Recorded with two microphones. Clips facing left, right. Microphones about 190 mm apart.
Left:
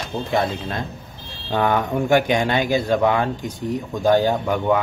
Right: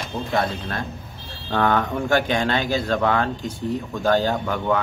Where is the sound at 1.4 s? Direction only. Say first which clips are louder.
Left 1 dB; 15° left (ahead or behind).